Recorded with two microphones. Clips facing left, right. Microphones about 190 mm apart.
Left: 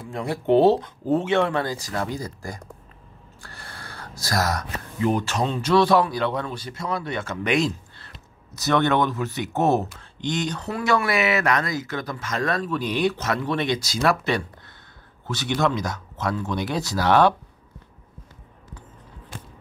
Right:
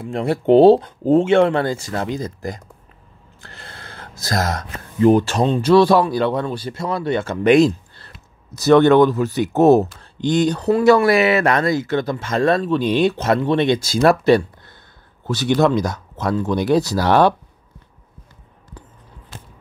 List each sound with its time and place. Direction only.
0.5 s speech: 30° right (ahead or behind)
3.3 s gasp: 20° right (ahead or behind)
5.0 s speech: 30° right (ahead or behind)
13.7 s speech: 50° right (ahead or behind)
15.2 s speech: 35° right (ahead or behind)